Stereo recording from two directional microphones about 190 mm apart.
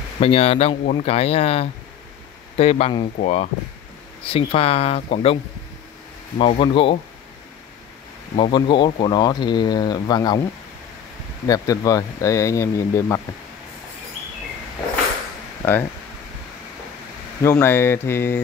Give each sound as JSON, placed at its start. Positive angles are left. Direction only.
{"t": 0.2, "sound": "speech", "side_deg": 30}
{"t": 8.4, "sound": "speech", "side_deg": 25}
{"t": 11.4, "sound": "speech", "side_deg": 15}
{"t": 17.4, "sound": "speech", "side_deg": 15}